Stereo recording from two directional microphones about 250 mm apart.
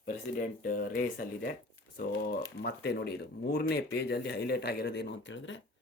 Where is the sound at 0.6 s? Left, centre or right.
Left.